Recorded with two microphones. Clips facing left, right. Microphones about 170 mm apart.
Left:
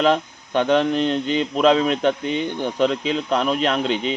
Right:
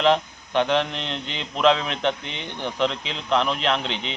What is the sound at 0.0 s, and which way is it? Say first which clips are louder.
Speech: left 1 dB; 45° left (ahead or behind).